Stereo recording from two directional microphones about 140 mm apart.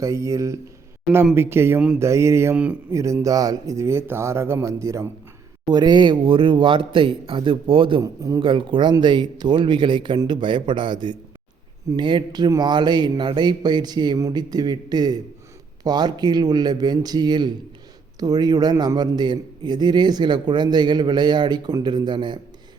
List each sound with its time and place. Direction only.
0.0 s speech: 20° right (ahead or behind)
5.6 s a man's voice: 30° right (ahead or behind)
8.0 s speech: 25° right (ahead or behind)
8.4 s a man's voice: 35° right (ahead or behind)